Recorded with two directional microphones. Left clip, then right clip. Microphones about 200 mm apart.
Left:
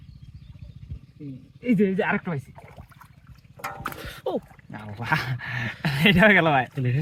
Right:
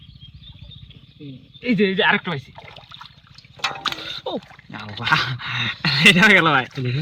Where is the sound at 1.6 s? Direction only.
15° right (ahead or behind).